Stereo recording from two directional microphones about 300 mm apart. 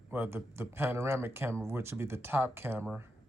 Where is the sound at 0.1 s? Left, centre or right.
Centre.